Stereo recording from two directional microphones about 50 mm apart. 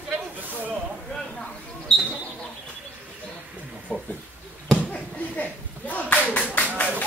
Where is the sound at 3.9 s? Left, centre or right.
Left.